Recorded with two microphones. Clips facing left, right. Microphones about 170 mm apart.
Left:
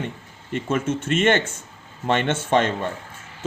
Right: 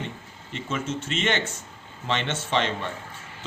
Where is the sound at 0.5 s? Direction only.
55° left (ahead or behind).